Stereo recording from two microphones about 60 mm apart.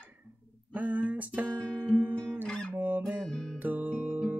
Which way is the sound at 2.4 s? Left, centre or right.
Centre.